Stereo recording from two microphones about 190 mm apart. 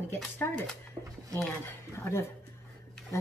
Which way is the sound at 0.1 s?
10° left (ahead or behind).